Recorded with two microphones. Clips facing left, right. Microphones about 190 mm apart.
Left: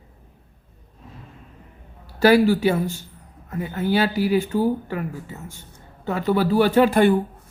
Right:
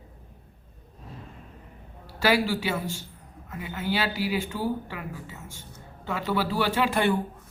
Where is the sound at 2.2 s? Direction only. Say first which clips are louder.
Left 9 dB; 45° left (ahead or behind).